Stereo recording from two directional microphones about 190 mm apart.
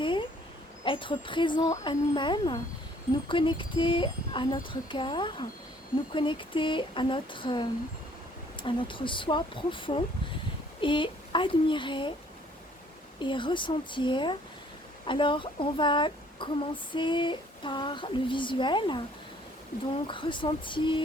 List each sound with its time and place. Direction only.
0.0 s a sound: 25° left (ahead or behind)
0.9 s speech: 25° left (ahead or behind)
13.1 s speech: 25° left (ahead or behind)
20.1 s speech: 25° left (ahead or behind)